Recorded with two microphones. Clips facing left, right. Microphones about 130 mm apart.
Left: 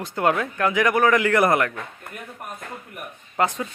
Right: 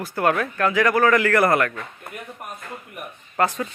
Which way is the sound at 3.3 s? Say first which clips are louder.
Right 1 dB; 15° left (ahead or behind).